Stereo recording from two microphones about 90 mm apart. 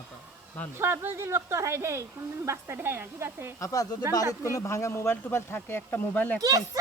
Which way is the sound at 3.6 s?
40° left (ahead or behind).